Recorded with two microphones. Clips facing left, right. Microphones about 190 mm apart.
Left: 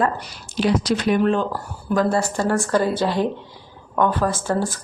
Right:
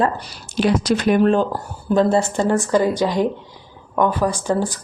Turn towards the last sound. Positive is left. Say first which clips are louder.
# right 2 dB
turn(degrees=-15)  # may be behind; listen again after turning